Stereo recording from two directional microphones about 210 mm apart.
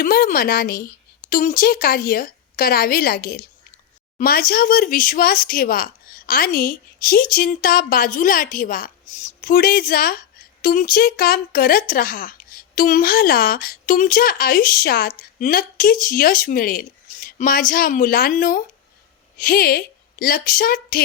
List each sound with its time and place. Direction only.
0.0 s a woman's voice: 40° left (ahead or behind)